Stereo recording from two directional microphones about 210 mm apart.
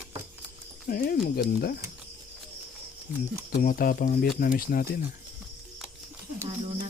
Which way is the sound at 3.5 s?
45° left (ahead or behind).